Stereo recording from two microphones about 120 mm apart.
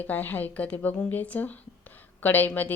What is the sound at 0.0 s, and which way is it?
Speech, 15° left (ahead or behind).